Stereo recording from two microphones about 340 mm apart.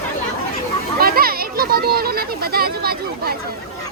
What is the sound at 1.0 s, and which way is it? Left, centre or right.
Speech, right.